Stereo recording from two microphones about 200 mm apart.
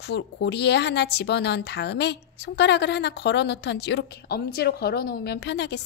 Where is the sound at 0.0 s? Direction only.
55° left (ahead or behind).